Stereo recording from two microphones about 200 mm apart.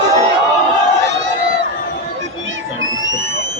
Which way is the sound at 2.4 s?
70° right (ahead or behind).